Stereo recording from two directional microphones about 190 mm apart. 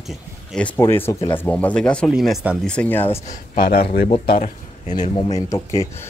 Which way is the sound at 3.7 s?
50° left (ahead or behind).